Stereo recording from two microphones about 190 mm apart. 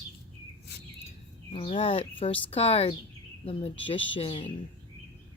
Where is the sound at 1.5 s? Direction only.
30° left (ahead or behind).